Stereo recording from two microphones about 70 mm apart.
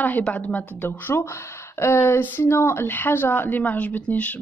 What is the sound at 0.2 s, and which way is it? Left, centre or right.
Speech, centre.